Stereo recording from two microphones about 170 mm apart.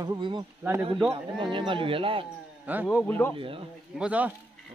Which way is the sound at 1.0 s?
30° right (ahead or behind).